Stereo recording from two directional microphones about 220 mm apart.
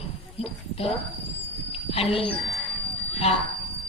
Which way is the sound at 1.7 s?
25° left (ahead or behind).